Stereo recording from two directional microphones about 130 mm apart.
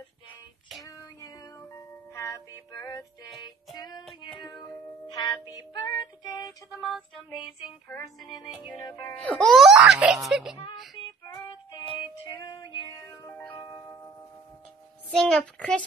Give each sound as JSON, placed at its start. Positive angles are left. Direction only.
{"t": 0.8, "sound": "music", "side_deg": 25}
{"t": 4.0, "sound": "music", "side_deg": 0}
{"t": 5.0, "sound": "music", "side_deg": 30}
{"t": 6.8, "sound": "speech", "side_deg": 0}
{"t": 8.4, "sound": "music", "side_deg": 30}
{"t": 9.2, "sound": "speech", "side_deg": 5}
{"t": 11.2, "sound": "music", "side_deg": 30}
{"t": 15.0, "sound": "a child's voice", "side_deg": 5}